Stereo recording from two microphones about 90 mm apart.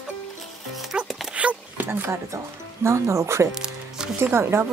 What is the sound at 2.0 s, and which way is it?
Speech, 30° right (ahead or behind).